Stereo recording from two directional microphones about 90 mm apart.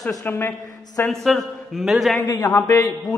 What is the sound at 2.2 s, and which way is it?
Speech, 45° left (ahead or behind).